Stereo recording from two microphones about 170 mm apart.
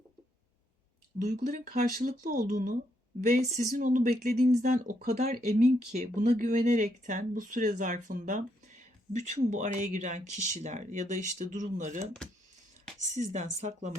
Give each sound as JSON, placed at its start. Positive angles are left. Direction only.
{"t": 1.2, "sound": "speech", "side_deg": -45}